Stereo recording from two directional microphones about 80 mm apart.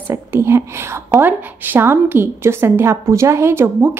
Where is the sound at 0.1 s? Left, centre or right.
Right.